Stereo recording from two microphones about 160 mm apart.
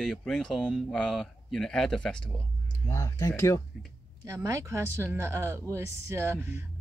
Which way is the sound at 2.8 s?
20° left (ahead or behind).